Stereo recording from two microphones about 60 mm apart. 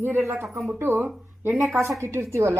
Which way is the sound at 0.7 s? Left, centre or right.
Right.